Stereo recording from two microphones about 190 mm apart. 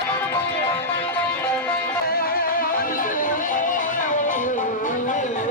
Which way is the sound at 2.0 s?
55° left (ahead or behind).